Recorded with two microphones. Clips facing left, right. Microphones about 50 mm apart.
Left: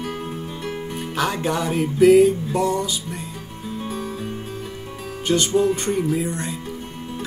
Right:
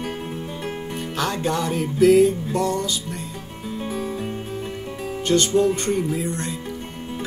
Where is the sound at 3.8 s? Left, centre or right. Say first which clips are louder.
Right 2 dB; centre.